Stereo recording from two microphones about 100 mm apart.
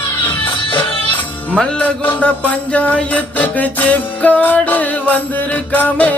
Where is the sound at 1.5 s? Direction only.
10° left (ahead or behind).